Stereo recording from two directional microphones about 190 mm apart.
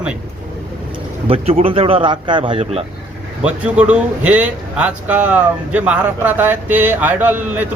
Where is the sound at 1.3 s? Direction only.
30° right (ahead or behind).